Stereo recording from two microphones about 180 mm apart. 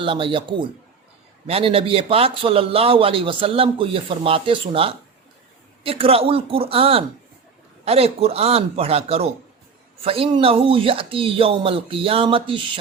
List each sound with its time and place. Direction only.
0.0 s speech: 30° right (ahead or behind)
1.5 s a man's voice: 30° right (ahead or behind)